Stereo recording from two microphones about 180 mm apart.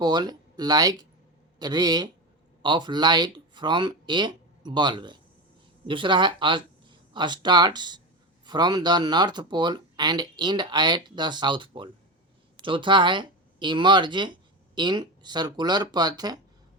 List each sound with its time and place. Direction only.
0.0 s speech: 25° right (ahead or behind)